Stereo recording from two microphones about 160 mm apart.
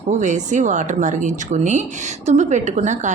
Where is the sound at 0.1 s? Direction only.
50° right (ahead or behind).